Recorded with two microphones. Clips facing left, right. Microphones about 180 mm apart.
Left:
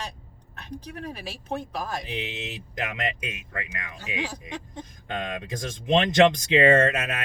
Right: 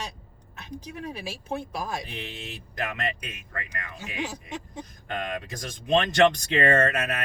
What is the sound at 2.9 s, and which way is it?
Speech, 20° left (ahead or behind).